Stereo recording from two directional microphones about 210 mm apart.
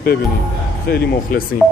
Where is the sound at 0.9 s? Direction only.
50° left (ahead or behind).